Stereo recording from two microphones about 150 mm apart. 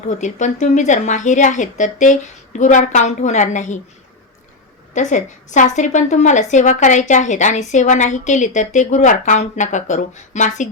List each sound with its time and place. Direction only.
0.1 s a woman's voice: 55° left (ahead or behind)
4.9 s a woman's voice: 55° left (ahead or behind)